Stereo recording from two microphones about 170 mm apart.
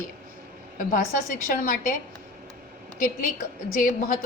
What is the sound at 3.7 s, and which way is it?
Speech, 55° left (ahead or behind).